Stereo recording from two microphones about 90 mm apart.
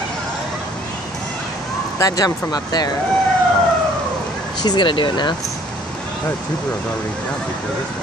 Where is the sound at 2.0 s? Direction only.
45° left (ahead or behind).